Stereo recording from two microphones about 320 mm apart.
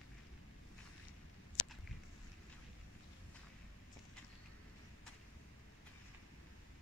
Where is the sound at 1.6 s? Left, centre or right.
Left.